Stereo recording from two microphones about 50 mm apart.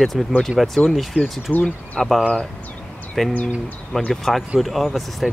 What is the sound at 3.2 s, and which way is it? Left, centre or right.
Speech, centre.